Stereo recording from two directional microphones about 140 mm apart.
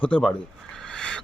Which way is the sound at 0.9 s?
5° left (ahead or behind).